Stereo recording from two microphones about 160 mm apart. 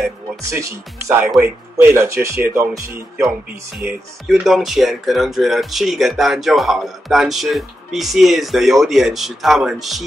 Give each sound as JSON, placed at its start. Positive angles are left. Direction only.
{"t": 0.4, "sound": "speech", "side_deg": -20}
{"t": 3.7, "sound": "speech", "side_deg": -5}